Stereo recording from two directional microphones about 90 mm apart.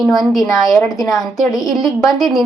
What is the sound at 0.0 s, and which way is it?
A woman's voice, centre (ahead or behind).